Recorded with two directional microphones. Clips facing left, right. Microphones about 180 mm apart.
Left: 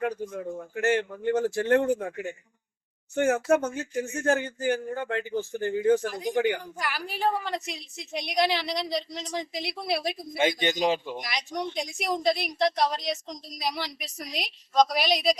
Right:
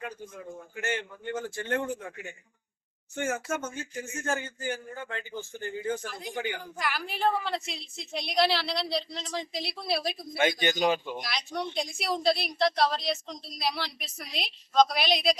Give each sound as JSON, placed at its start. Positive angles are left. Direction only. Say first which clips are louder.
{"t": 0.3, "sound": "a man's voice", "louder": "left 8 dB", "side_deg": 65}
{"t": 1.8, "sound": "a man's voice", "louder": "left 8 dB", "side_deg": 50}
{"t": 3.2, "sound": "a man's voice", "louder": "left 9 dB", "side_deg": 65}
{"t": 6.7, "sound": "a woman's voice", "louder": "even", "side_deg": 10}